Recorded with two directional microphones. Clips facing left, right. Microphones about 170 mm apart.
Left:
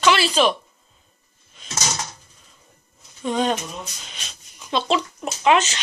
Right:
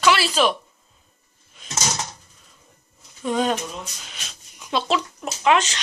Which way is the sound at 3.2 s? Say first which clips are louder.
Even; centre (ahead or behind).